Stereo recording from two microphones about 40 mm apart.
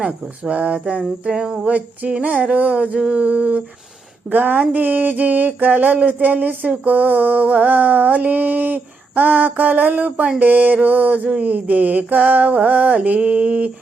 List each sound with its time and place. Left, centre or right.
0.0 s speech: right
1.3 s a sound: centre
1.6 s speech: right
4.3 s mantra: right
11.3 s mantra: right
13.1 s speech: right